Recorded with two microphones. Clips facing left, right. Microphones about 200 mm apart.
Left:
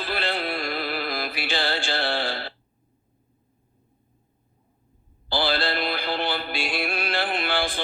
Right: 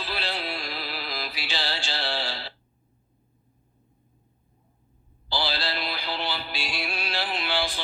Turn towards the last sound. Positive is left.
turn(degrees=55)  # may be behind; listen again after turning